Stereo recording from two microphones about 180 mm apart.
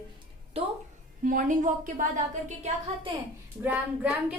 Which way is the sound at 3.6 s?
10° right (ahead or behind).